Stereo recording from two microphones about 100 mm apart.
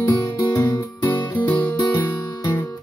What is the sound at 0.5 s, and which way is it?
Music, 35° left (ahead or behind).